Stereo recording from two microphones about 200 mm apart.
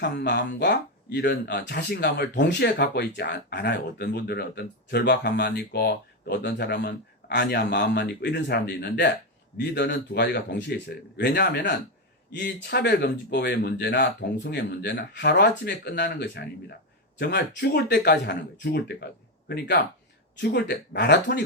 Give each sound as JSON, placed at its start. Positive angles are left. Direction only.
{"t": 0.0, "sound": "speech", "side_deg": 55}